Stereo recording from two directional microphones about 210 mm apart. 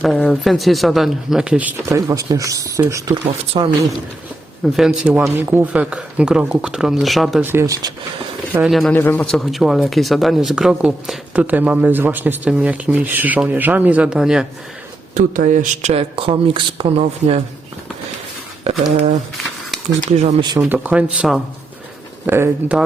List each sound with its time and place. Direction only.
0.0 s speech: centre (ahead or behind)
3.6 s speech: 25° right (ahead or behind)
4.6 s speech: centre (ahead or behind)
8.5 s speech: centre (ahead or behind)
15.1 s speech: 40° right (ahead or behind)
18.7 s speech: 30° right (ahead or behind)
20.6 s speech: 5° right (ahead or behind)